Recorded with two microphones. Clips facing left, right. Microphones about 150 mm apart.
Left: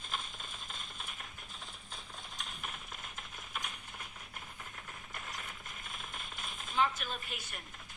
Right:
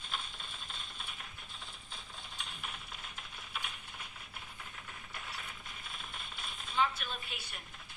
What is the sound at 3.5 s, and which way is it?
Coin, 45° left (ahead or behind).